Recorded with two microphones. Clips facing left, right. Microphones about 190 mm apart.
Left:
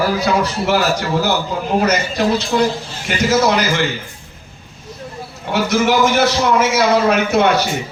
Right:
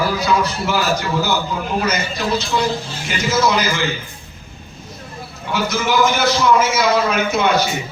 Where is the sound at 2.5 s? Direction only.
55° left (ahead or behind).